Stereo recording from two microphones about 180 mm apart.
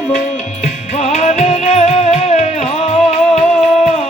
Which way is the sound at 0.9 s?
35° left (ahead or behind).